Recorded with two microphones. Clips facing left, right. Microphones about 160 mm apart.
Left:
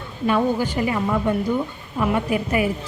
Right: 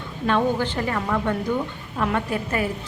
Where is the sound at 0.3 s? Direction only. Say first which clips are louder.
Left 1 dB; 10° left (ahead or behind).